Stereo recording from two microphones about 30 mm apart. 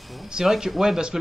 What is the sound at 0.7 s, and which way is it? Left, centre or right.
Speech, centre.